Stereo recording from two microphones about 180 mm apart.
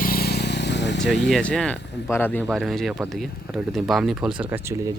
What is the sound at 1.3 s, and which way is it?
Speech, 5° left (ahead or behind).